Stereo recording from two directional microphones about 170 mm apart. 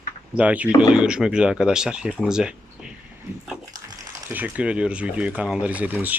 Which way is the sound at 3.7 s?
20° right (ahead or behind).